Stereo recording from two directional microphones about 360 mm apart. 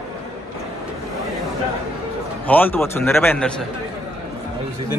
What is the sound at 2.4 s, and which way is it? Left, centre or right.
A man's voice, centre.